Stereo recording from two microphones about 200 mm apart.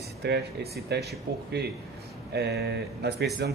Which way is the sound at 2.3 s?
55° right (ahead or behind).